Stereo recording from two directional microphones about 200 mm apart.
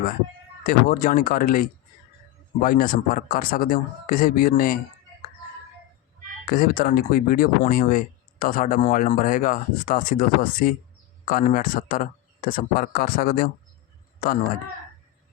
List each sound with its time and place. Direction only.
0.6 s speech: 45° left (ahead or behind)
6.4 s speech: 45° left (ahead or behind)